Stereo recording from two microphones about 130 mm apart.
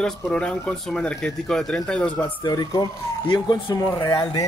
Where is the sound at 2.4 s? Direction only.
30° left (ahead or behind).